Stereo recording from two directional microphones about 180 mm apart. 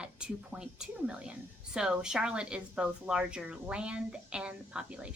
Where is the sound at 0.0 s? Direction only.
5° right (ahead or behind).